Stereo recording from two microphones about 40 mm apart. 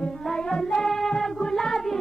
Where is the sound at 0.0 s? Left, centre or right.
Centre.